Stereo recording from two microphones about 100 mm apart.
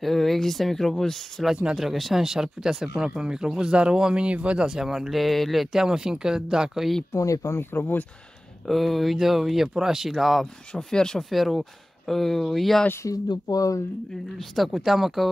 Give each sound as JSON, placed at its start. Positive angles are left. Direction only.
{"t": 0.0, "sound": "speech", "side_deg": 0}
{"t": 7.1, "sound": "speech", "side_deg": 35}
{"t": 8.6, "sound": "speech", "side_deg": 0}
{"t": 13.3, "sound": "speech", "side_deg": 40}
{"t": 14.5, "sound": "speech", "side_deg": 0}